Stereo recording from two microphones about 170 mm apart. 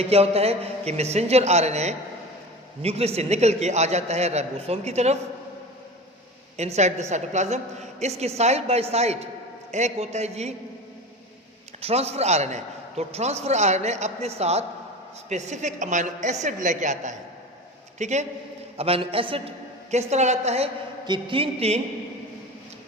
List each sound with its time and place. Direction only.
0.0 s a man's voice: 35° right (ahead or behind)
6.6 s a man's voice: 40° right (ahead or behind)
11.8 s a man's voice: 35° right (ahead or behind)
21.0 s a man's voice: 25° right (ahead or behind)